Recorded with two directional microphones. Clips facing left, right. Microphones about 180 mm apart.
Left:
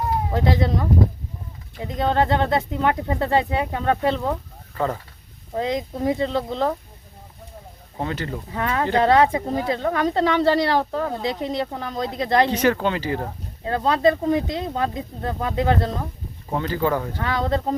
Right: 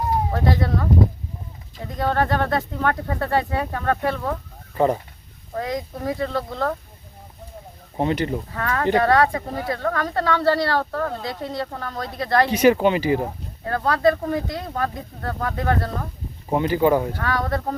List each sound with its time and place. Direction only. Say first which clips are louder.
0.3 s speech: left 1 dB; 20° left (ahead or behind)
4.8 s speech: right 5 dB; 20° right (ahead or behind)
5.5 s speech: left 3 dB; 20° left (ahead or behind)
7.9 s speech: right 5 dB; 20° right (ahead or behind)
8.5 s speech: even; 20° left (ahead or behind)
12.5 s speech: right 4 dB; 15° right (ahead or behind)
13.7 s speech: left 1 dB; 20° left (ahead or behind)
16.5 s speech: right 4 dB; 15° right (ahead or behind)
17.2 s speech: left 1 dB; 20° left (ahead or behind)